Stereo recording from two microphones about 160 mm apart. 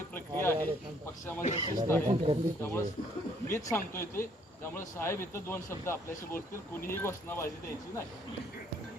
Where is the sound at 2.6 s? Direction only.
15° left (ahead or behind).